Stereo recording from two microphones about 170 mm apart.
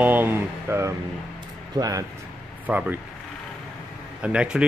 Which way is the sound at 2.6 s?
10° right (ahead or behind).